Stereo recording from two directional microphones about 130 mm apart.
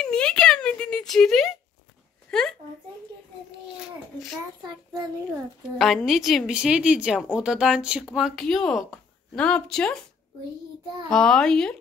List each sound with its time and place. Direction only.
0.0 s a sound: 5° left (ahead or behind)
2.3 s speech: 5° left (ahead or behind)
4.6 s a child's voice: 30° right (ahead or behind)
6.0 s speech: centre (ahead or behind)
11.1 s speech: 5° left (ahead or behind)